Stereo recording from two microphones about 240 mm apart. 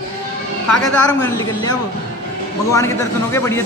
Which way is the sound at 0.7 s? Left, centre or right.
Centre.